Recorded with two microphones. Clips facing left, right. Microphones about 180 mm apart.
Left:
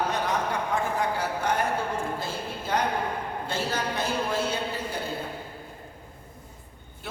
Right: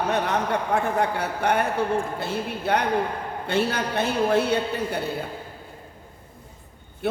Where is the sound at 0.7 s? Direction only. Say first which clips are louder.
Right 4 dB; 65° right (ahead or behind).